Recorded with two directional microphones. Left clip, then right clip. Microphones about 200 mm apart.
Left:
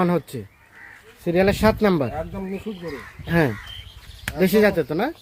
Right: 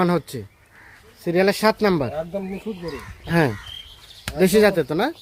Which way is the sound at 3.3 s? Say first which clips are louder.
Right 1 dB; 5° left (ahead or behind).